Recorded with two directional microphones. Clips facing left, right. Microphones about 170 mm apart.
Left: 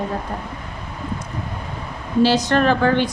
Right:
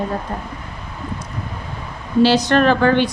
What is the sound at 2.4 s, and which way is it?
Speech, 75° right (ahead or behind).